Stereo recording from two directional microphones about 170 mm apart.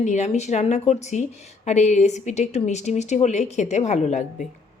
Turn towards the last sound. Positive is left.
turn(degrees=45)  # may be behind; listen again after turning